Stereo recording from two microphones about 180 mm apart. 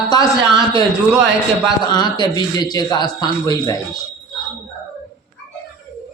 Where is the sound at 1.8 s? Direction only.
25° left (ahead or behind).